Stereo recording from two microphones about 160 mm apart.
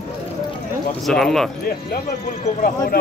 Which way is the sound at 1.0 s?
Centre (ahead or behind).